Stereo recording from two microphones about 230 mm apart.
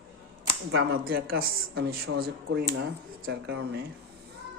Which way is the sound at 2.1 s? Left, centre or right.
Right.